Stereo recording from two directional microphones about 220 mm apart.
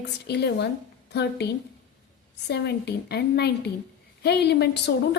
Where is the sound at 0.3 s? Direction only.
50° left (ahead or behind).